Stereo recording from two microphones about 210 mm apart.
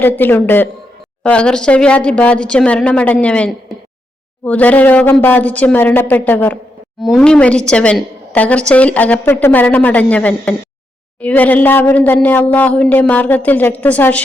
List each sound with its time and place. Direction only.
0.0 s a woman's voice: 10° left (ahead or behind)